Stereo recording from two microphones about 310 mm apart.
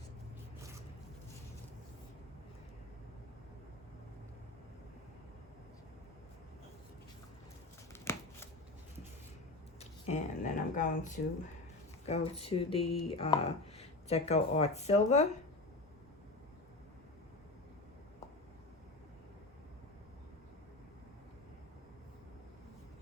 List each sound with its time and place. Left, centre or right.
10.1 s speech: left